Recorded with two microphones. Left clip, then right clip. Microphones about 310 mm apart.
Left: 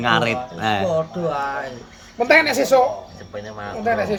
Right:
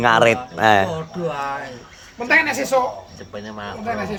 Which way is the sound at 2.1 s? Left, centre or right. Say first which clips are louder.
Left 2 dB; left.